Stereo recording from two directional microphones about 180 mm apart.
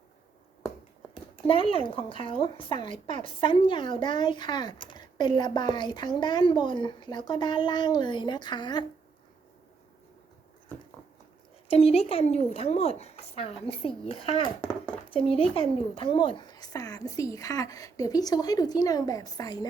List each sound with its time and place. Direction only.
1.1 s speech: 30° left (ahead or behind)
11.7 s speech: 35° left (ahead or behind)